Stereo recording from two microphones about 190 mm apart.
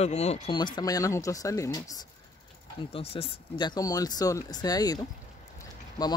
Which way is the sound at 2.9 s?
30° left (ahead or behind).